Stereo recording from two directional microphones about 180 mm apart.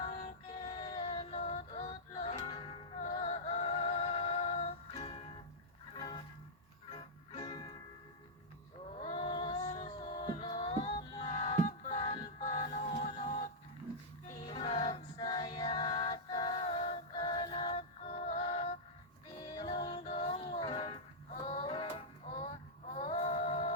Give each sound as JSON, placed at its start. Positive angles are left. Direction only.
{"t": 0.0, "sound": "music", "side_deg": 35}
{"t": 0.7, "sound": "female singing", "side_deg": 25}
{"t": 1.1, "sound": "synthetic singing", "side_deg": 35}
{"t": 2.4, "sound": "music", "side_deg": 25}
{"t": 9.0, "sound": "music", "side_deg": 35}
{"t": 14.4, "sound": "music", "side_deg": 30}
{"t": 17.7, "sound": "music", "side_deg": 45}
{"t": 19.5, "sound": "music", "side_deg": 25}
{"t": 20.1, "sound": "music", "side_deg": 40}
{"t": 21.2, "sound": "music", "side_deg": 40}